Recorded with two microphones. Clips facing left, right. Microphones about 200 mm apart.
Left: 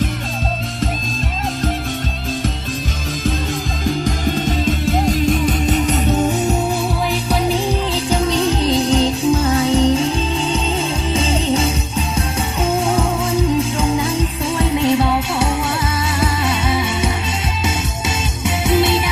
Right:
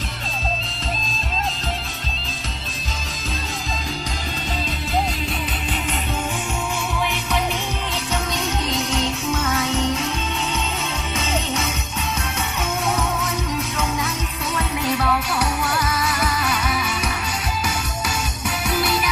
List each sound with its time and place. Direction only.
3.8 s music: 50° left (ahead or behind); by 10.1 s 30° left (ahead or behind)
11.1 s music: 30° left (ahead or behind)